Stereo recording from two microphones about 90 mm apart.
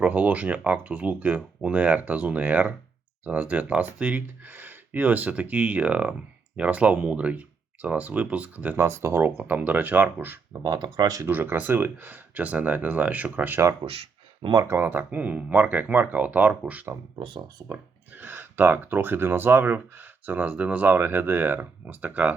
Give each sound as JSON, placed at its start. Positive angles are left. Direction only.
{"t": 0.0, "sound": "speech", "side_deg": -15}
{"t": 8.8, "sound": "speech", "side_deg": -30}
{"t": 10.6, "sound": "speech", "side_deg": -55}
{"t": 11.3, "sound": "speech", "side_deg": -20}
{"t": 13.8, "sound": "a sound", "side_deg": -90}
{"t": 14.6, "sound": "speech", "side_deg": -25}
{"t": 17.2, "sound": "speech", "side_deg": -70}
{"t": 17.7, "sound": "speech", "side_deg": -20}